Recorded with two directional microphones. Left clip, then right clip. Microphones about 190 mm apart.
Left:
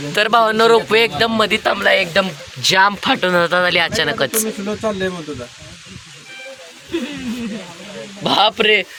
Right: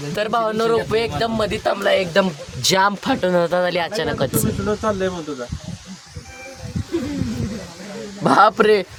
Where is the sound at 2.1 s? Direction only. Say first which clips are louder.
Left 1 dB; 30° right (ahead or behind).